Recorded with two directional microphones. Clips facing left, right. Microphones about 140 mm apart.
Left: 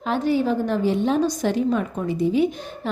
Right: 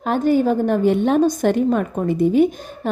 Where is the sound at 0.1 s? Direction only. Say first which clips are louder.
Right 4 dB; 50° right (ahead or behind).